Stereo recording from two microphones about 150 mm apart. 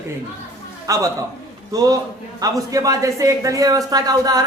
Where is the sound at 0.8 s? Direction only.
20° right (ahead or behind).